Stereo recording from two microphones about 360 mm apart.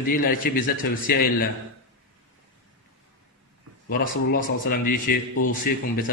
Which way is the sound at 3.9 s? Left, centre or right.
Left.